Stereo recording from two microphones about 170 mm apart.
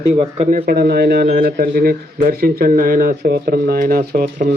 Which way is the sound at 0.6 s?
65° right (ahead or behind).